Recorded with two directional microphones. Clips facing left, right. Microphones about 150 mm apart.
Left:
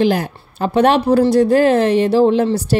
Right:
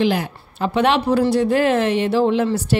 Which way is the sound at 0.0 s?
40° left (ahead or behind).